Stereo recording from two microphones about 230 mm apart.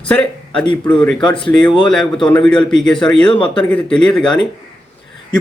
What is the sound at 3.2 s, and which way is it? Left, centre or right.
Speech, left.